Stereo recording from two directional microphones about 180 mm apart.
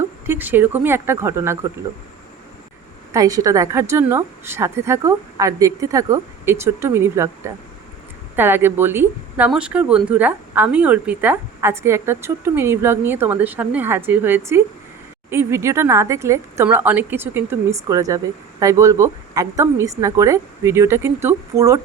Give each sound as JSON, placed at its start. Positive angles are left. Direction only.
{"t": 0.3, "sound": "a woman's voice", "side_deg": -10}
{"t": 3.1, "sound": "a woman's voice", "side_deg": -20}